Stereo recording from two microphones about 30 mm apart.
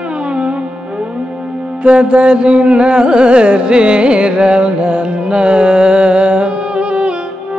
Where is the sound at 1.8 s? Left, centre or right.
Right.